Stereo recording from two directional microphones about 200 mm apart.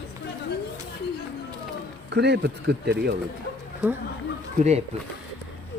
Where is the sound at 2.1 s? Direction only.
55° right (ahead or behind).